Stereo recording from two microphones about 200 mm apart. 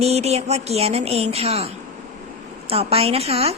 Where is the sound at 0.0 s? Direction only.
30° right (ahead or behind).